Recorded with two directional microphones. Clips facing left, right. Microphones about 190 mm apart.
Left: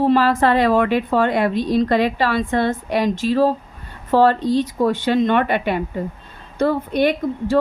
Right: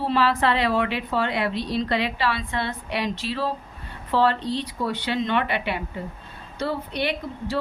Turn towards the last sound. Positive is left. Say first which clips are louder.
# left 9 dB
turn(degrees=50)  # may be behind; listen again after turning